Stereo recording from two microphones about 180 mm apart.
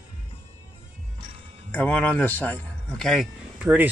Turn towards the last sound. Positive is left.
turn(degrees=-10)  # may be behind; listen again after turning